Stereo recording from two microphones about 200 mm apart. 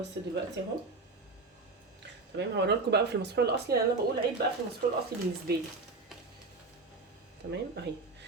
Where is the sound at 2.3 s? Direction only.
55° right (ahead or behind).